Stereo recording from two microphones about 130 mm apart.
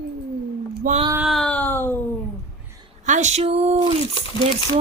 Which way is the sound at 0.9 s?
90° right.